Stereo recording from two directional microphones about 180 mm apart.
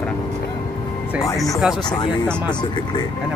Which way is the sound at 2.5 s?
25° left (ahead or behind).